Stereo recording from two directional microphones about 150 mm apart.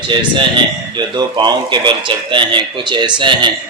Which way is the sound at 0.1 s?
30° right (ahead or behind).